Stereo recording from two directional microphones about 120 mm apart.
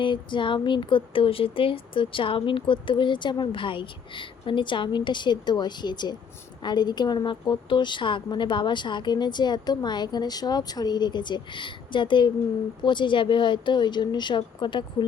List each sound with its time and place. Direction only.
0.0 s a woman's voice: 40° left (ahead or behind)